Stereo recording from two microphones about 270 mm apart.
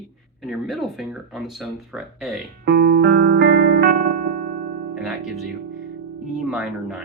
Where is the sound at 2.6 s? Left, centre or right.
Right.